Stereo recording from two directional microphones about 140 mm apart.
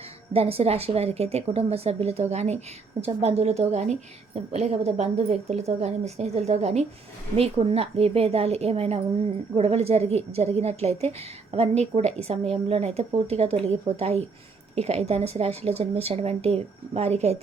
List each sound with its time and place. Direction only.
0.3 s speech: 45° right (ahead or behind)